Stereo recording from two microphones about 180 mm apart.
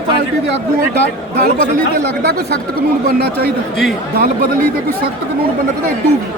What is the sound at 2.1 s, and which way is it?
Speech, 65° right (ahead or behind).